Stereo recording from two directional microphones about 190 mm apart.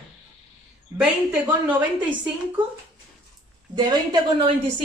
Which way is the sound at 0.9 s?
5° right (ahead or behind).